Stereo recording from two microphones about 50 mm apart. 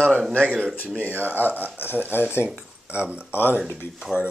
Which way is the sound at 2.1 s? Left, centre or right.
Left.